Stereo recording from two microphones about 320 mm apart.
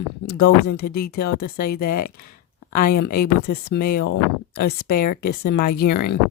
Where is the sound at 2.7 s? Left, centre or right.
Left.